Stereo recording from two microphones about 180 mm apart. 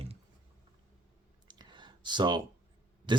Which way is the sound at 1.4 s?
25° right (ahead or behind).